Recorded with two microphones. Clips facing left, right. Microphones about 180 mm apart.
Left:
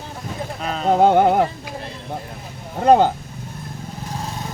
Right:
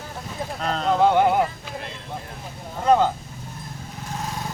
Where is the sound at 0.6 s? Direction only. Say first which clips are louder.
Left 3 dB; 5° left (ahead or behind).